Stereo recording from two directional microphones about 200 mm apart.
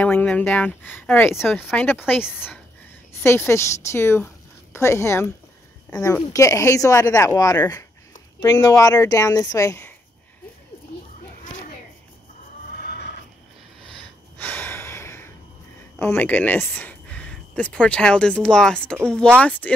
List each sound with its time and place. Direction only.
0.0 s speech: 10° left (ahead or behind)
1.4 s speech: centre (ahead or behind)
2.2 s speech: 5° right (ahead or behind)
3.2 s speech: 10° left (ahead or behind)
6.3 s speech: 15° left (ahead or behind)
12.8 s neigh: 50° left (ahead or behind)
13.9 s gasp: 10° left (ahead or behind)
16.0 s speech: 10° left (ahead or behind)